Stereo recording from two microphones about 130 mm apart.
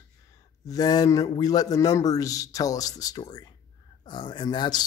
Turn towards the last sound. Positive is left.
turn(degrees=35)  # may be behind; listen again after turning